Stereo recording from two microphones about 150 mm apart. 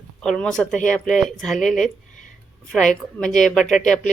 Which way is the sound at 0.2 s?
5° left (ahead or behind).